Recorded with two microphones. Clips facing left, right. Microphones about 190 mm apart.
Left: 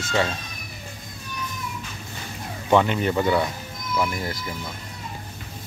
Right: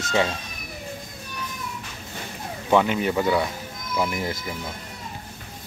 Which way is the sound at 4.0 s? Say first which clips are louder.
Right 1 dB; 20° right (ahead or behind).